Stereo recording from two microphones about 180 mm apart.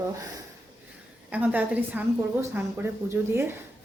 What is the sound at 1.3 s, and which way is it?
A woman's voice, 10° right (ahead or behind).